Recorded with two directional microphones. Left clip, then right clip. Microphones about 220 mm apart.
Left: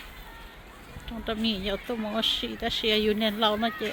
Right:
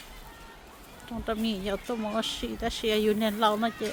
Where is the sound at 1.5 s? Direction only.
10° right (ahead or behind).